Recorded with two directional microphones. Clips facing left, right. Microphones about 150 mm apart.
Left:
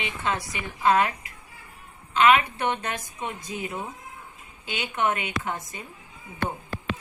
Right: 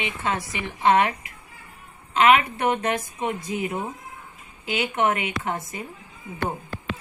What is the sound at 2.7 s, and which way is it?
A woman's voice, 30° right (ahead or behind).